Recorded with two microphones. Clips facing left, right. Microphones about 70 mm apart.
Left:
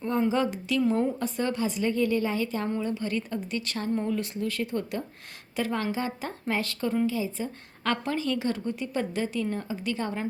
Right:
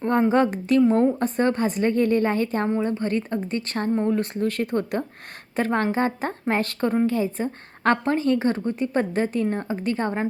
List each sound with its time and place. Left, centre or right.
0.0 s a woman's voice: right
0.8 s a woman's voice: right
2.6 s a woman's voice: right